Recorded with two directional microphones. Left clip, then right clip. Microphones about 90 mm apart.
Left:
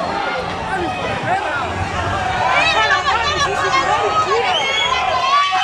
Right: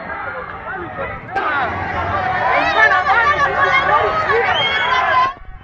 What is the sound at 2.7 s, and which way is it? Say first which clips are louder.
Chatter: right 3 dB; 25° left (ahead or behind).